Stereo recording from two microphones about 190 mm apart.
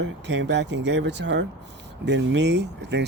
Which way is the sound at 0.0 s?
70° right (ahead or behind).